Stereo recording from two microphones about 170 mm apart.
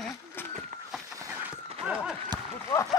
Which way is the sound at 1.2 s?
15° right (ahead or behind).